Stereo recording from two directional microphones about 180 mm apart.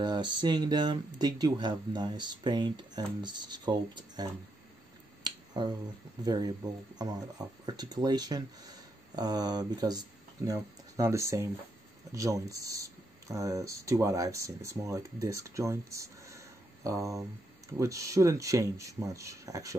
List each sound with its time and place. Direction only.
0.0 s speech: 25° right (ahead or behind)
5.2 s finger snapping: 25° right (ahead or behind)
6.2 s speech: 20° right (ahead or behind)